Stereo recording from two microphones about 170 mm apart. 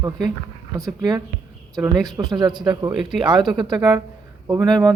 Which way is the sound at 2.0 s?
25° right (ahead or behind).